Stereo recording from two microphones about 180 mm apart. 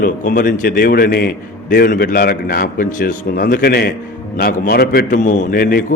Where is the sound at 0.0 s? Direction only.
50° left (ahead or behind).